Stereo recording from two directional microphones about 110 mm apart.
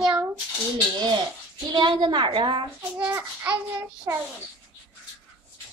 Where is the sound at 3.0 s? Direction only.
15° right (ahead or behind).